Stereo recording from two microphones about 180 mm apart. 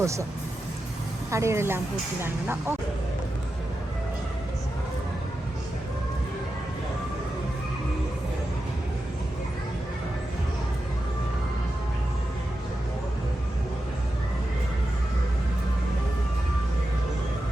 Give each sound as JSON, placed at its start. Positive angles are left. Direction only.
{"t": 0.0, "sound": "speech", "side_deg": -15}
{"t": 1.3, "sound": "speech", "side_deg": -15}